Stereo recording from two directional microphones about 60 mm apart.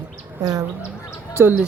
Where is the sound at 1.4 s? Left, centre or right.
Right.